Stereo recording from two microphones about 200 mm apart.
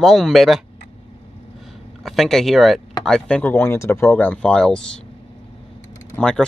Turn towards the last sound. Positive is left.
turn(degrees=5)  # may be behind; listen again after turning